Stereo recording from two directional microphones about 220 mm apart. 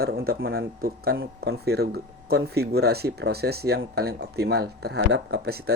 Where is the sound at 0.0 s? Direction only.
45° right (ahead or behind).